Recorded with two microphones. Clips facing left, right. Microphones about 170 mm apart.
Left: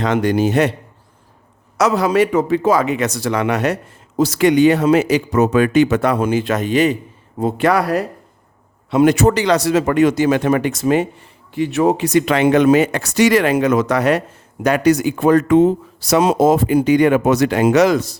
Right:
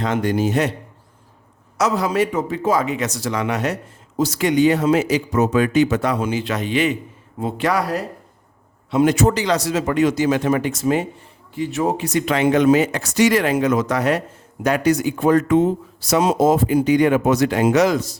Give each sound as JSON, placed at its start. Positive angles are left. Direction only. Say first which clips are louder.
{"t": 0.0, "sound": "speech", "louder": "left 4 dB", "side_deg": 80}
{"t": 1.8, "sound": "speech", "louder": "left 4 dB", "side_deg": 70}
{"t": 7.7, "sound": "speech", "louder": "left 4 dB", "side_deg": 60}